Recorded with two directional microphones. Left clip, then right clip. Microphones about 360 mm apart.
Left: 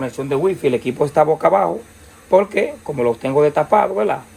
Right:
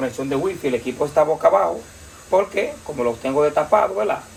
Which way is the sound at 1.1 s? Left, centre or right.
Centre.